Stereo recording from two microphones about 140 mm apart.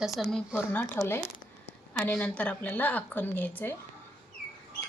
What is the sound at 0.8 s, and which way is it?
Speech, 20° left (ahead or behind).